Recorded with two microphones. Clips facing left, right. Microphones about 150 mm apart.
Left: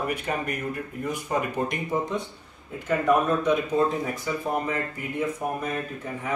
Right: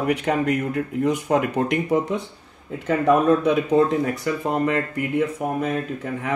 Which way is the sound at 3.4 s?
70° right (ahead or behind).